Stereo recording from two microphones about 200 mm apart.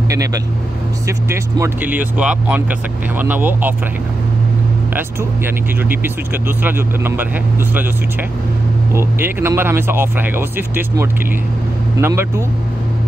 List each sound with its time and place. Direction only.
0.1 s speech: 15° right (ahead or behind)
6.6 s speech: 10° right (ahead or behind)
8.9 s speech: 10° right (ahead or behind)